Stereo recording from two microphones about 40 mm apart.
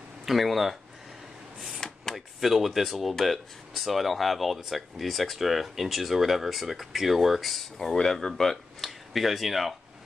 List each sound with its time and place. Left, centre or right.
0.2 s speech: centre
1.8 s a sound: centre
2.1 s speech: centre